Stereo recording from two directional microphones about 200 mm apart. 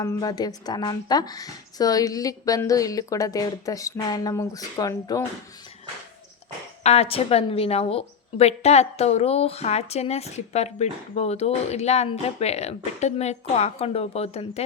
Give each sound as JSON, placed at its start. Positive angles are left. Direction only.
{"t": 0.0, "sound": "a woman's voice", "side_deg": 20}
{"t": 6.8, "sound": "a woman's voice", "side_deg": 30}